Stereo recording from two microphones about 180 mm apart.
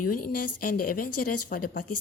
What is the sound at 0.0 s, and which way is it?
A woman's voice, 50° left (ahead or behind).